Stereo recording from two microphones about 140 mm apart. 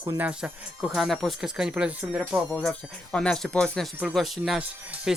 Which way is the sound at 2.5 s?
5° left (ahead or behind).